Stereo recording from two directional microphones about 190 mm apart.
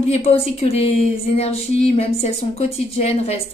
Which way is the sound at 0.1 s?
30° left (ahead or behind).